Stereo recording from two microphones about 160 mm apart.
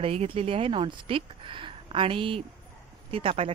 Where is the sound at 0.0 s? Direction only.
40° right (ahead or behind).